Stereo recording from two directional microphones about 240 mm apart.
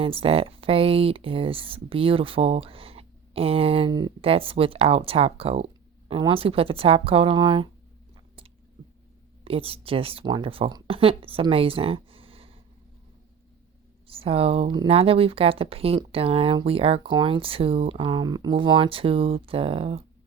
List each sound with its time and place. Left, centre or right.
0.0 s speech: right
9.4 s speech: right
14.1 s speech: right